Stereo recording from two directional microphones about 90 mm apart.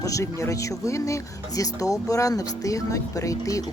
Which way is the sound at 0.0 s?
35° left (ahead or behind).